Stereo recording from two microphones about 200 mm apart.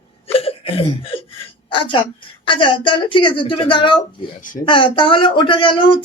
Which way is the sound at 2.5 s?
25° left (ahead or behind).